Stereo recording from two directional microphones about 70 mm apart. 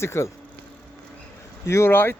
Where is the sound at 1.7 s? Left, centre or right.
Left.